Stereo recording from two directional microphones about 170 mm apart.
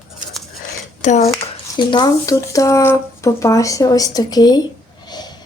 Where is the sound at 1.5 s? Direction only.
25° left (ahead or behind).